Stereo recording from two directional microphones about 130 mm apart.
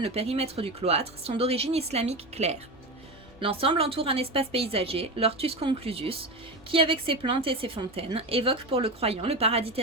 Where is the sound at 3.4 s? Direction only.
45° right (ahead or behind).